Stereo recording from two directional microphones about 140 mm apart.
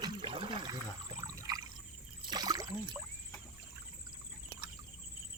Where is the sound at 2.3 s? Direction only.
30° right (ahead or behind).